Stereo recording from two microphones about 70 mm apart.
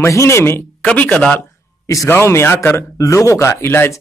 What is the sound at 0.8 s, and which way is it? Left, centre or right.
Speech, left.